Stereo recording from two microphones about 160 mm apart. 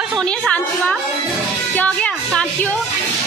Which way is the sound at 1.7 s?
10° left (ahead or behind).